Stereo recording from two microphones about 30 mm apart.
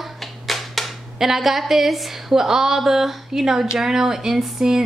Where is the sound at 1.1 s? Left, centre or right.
Centre.